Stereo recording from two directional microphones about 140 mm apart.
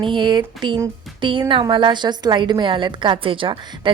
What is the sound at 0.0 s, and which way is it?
A woman's voice, 35° right (ahead or behind).